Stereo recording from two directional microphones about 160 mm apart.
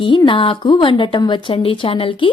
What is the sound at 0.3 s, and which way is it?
A woman's voice, 30° left (ahead or behind).